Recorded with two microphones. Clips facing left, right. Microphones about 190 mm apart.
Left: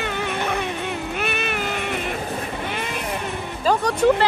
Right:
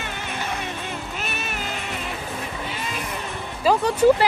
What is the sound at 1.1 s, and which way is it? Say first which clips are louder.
Music: left 6 dB; 60° left (ahead or behind).